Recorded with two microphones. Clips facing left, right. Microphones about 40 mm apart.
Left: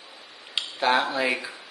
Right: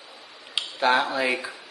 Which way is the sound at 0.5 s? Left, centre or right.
Centre.